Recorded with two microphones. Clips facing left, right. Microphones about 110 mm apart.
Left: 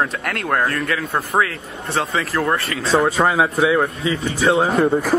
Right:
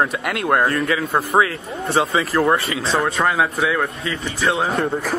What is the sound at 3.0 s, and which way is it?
Speech, 10° left (ahead or behind).